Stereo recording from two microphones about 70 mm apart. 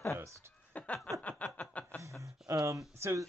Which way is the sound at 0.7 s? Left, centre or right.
Centre.